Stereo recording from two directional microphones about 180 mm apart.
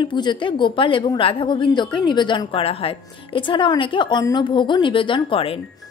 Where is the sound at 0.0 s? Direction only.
25° left (ahead or behind).